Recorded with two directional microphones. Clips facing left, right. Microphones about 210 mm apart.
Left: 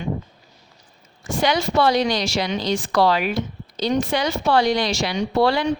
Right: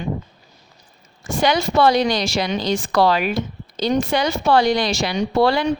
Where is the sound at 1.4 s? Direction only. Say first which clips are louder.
Right 2 dB; 50° right (ahead or behind).